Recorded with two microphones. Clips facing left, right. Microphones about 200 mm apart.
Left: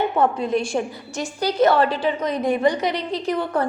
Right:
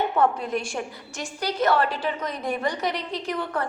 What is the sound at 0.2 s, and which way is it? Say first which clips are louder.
Speech: left 3 dB; 25° left (ahead or behind).